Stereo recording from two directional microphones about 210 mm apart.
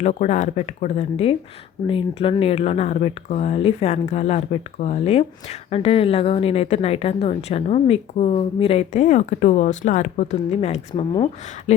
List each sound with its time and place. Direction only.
0.0 s speech: 35° left (ahead or behind)